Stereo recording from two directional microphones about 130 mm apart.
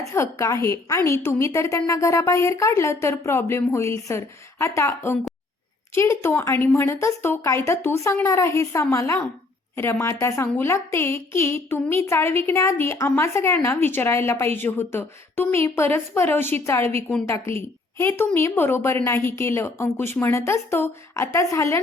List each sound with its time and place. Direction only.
0.1 s a woman's voice: 25° left (ahead or behind)